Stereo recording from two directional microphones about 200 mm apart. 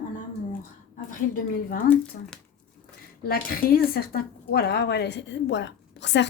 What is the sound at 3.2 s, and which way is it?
Speech, 50° left (ahead or behind).